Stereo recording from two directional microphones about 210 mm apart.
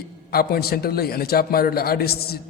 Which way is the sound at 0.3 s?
45° left (ahead or behind).